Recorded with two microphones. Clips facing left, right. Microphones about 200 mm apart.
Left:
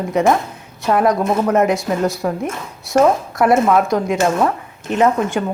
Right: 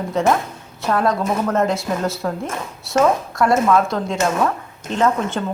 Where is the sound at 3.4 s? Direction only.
20° left (ahead or behind).